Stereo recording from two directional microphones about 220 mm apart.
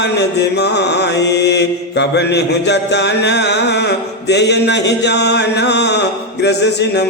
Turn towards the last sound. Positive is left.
turn(degrees=50)  # may be behind; listen again after turning